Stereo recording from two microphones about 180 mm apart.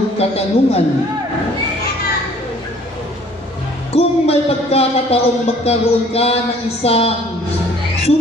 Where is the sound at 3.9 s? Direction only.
35° left (ahead or behind).